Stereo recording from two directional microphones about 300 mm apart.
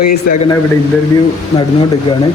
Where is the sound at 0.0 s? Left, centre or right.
Left.